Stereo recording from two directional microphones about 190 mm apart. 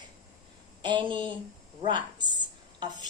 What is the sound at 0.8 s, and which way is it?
Speech, 25° right (ahead or behind).